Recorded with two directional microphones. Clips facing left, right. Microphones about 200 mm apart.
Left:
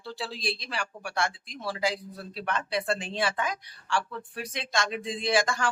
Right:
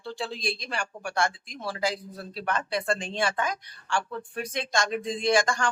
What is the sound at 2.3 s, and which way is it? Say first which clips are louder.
Speech: right 2 dB; 40° right (ahead or behind).